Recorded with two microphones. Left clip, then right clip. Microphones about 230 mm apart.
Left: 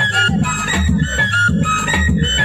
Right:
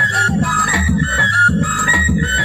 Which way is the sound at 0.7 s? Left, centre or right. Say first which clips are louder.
Right 2 dB; left.